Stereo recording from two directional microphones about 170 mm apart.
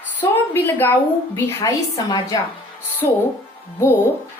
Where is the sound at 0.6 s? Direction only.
10° left (ahead or behind).